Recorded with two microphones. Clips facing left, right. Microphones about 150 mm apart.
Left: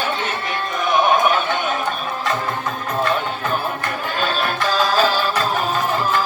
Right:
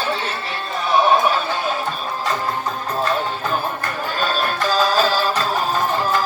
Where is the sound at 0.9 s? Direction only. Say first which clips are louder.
Right 1 dB; 30° right (ahead or behind).